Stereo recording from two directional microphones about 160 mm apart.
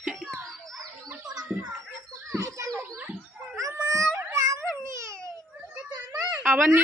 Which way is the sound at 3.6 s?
20° right (ahead or behind).